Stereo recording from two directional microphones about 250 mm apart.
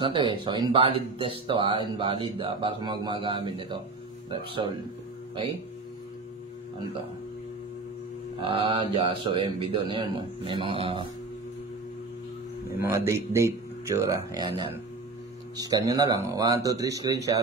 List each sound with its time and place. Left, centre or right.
0.0 s speech: centre
8.4 s speech: centre
12.8 s speech: centre